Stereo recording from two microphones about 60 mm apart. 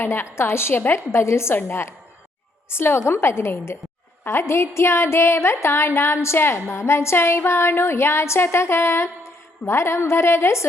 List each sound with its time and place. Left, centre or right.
0.0 s a woman's voice: left